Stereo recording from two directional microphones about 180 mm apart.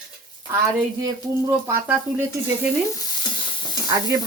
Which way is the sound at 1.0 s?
15° right (ahead or behind).